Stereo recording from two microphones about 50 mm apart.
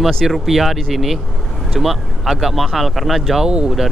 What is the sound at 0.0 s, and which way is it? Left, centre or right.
Speech, centre.